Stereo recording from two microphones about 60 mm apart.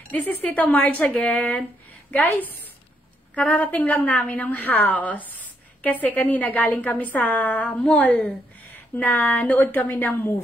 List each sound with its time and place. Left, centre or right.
0.1 s a woman's voice: left
8.9 s a woman's voice: left